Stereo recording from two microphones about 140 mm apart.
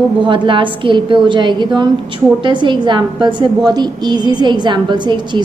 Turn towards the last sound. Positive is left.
turn(degrees=-35)  # may be behind; listen again after turning